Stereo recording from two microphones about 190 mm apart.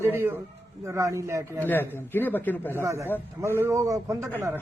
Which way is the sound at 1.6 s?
10° left (ahead or behind).